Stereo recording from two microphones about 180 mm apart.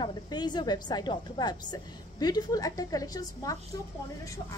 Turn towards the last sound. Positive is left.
turn(degrees=20)  # may be behind; listen again after turning